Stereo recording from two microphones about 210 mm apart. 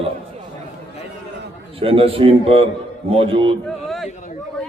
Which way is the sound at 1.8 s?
25° right (ahead or behind).